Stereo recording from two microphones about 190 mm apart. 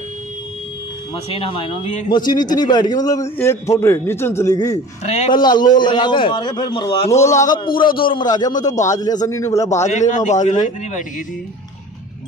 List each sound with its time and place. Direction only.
1.3 s a man's voice: 30° left (ahead or behind)
2.1 s a man's voice: 20° left (ahead or behind)
9.8 s a man's voice: 35° left (ahead or behind)